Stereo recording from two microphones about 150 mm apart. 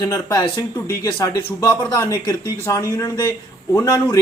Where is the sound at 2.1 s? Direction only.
25° left (ahead or behind).